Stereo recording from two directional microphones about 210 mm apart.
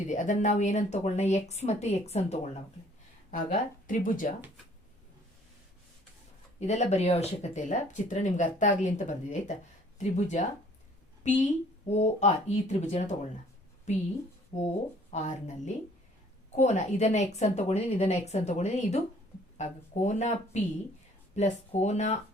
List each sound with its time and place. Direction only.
0.1 s speech: 35° left (ahead or behind)
6.6 s speech: 35° left (ahead or behind)
15.1 s speech: 35° left (ahead or behind)